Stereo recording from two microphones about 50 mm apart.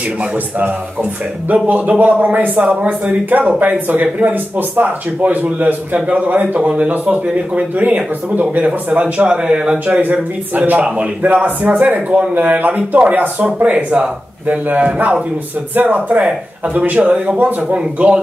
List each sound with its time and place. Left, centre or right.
1.5 s a man's voice: right
9.8 s a man's voice: right
12.1 s speech: right
12.4 s a man's voice: right